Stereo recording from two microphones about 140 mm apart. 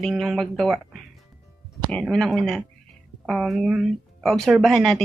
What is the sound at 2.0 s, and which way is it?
Speech, centre (ahead or behind).